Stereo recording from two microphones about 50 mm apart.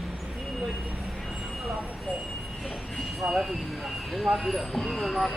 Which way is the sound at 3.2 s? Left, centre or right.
Right.